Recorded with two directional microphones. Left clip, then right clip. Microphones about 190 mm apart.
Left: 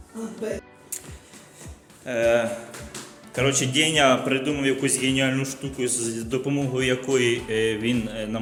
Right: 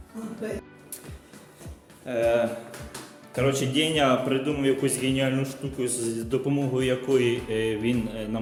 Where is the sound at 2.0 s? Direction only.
Centre (ahead or behind).